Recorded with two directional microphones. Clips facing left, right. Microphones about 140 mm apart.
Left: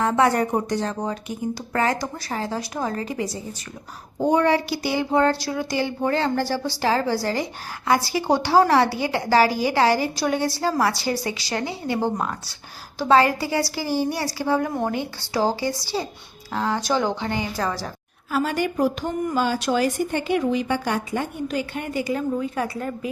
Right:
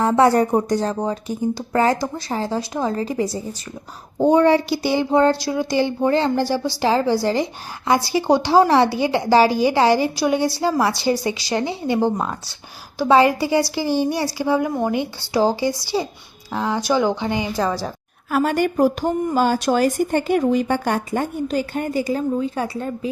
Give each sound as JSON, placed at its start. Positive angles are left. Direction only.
{"t": 0.0, "sound": "speech", "side_deg": -30}
{"t": 18.3, "sound": "speech", "side_deg": -55}